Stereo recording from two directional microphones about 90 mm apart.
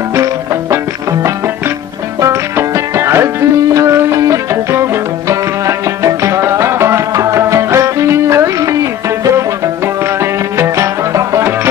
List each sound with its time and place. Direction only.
0.1 s music: 30° right (ahead or behind)
2.2 s music: 30° right (ahead or behind)
10.6 s music: 35° right (ahead or behind)